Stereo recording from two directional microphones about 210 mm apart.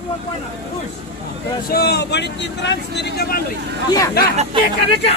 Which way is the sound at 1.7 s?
50° left (ahead or behind).